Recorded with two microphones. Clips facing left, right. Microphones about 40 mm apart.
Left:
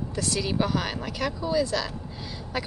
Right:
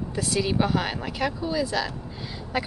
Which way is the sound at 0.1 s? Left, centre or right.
Centre.